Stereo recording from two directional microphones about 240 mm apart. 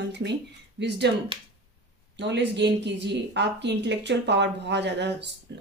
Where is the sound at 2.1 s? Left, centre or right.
Right.